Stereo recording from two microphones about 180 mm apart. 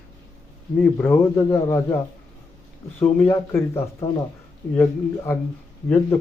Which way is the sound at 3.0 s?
10° left (ahead or behind).